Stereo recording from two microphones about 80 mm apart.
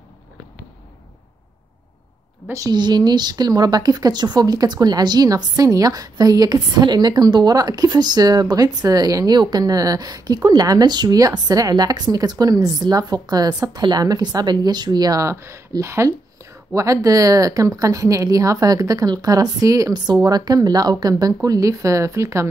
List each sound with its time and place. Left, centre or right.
2.7 s a woman's voice: right
15.1 s speech: right